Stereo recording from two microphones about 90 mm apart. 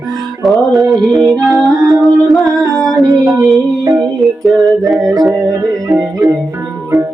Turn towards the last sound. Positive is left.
turn(degrees=0)  # may be behind; listen again after turning